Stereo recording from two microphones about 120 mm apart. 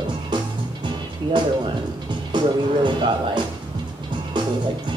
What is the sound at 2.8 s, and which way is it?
Speech, 40° right (ahead or behind).